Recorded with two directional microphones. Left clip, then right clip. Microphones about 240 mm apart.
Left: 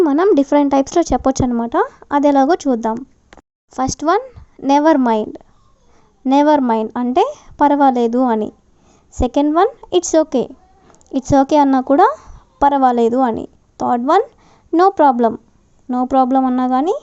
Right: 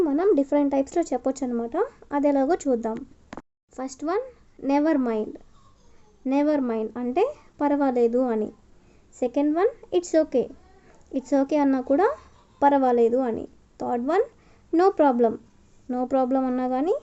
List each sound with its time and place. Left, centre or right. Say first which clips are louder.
0.0 s a woman's voice: left 8 dB; left